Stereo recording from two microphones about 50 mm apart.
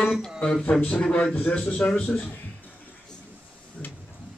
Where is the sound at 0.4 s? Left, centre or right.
Centre.